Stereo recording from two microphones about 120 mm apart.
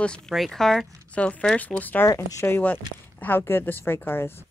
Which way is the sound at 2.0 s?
25° left (ahead or behind).